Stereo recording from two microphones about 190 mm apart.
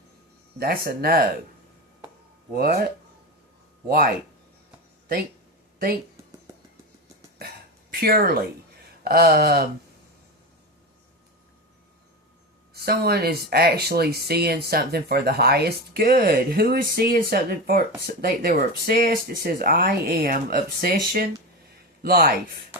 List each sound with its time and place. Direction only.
0.6 s speech: 50° right (ahead or behind)
2.5 s speech: 55° right (ahead or behind)
3.8 s speech: 50° right (ahead or behind)
7.3 s throat clearing: 55° right (ahead or behind)
9.0 s speech: 55° right (ahead or behind)
12.7 s speech: 55° right (ahead or behind)